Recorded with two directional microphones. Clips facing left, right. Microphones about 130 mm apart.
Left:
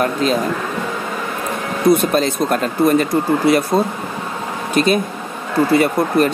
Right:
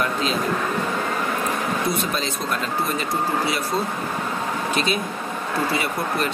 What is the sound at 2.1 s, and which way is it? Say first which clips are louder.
Speech: left 9 dB; 50° left (ahead or behind).